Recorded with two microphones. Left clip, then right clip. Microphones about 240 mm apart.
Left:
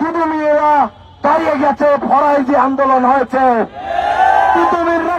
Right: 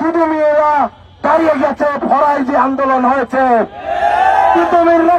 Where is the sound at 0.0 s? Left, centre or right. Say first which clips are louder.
Right 3 dB; right.